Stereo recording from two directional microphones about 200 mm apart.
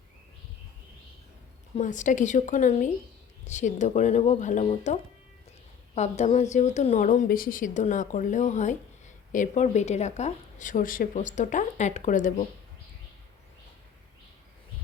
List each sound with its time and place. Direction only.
1.7 s a woman's voice: 40° left (ahead or behind)